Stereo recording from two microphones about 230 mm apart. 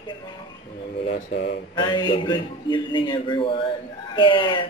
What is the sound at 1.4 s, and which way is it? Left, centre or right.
Speech, centre.